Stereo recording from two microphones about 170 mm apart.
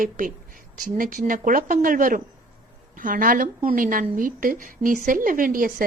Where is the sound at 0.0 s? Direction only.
50° right (ahead or behind).